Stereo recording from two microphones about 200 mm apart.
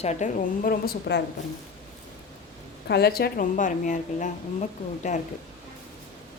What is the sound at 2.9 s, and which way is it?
A woman's voice, 55° left (ahead or behind).